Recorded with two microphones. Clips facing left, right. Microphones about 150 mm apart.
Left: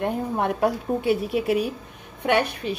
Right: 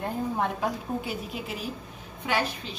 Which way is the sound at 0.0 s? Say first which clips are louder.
Left 4 dB; 65° left (ahead or behind).